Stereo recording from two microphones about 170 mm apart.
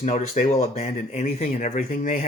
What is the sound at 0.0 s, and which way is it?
Speech, 40° left (ahead or behind).